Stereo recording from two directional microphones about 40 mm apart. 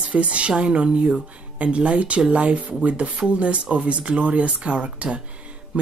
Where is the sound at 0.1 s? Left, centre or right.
Right.